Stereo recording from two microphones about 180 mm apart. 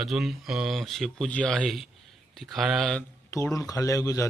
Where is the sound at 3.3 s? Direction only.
15° left (ahead or behind).